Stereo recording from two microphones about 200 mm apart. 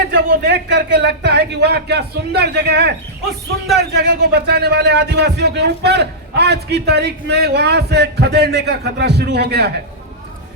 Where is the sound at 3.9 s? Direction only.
55° right (ahead or behind).